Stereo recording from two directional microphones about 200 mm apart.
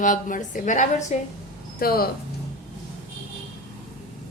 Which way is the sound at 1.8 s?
50° left (ahead or behind).